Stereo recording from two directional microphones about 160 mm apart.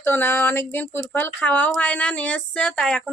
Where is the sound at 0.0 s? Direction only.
15° left (ahead or behind).